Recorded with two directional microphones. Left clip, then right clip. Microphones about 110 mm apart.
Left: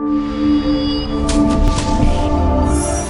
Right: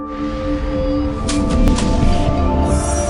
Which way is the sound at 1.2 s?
Centre (ahead or behind).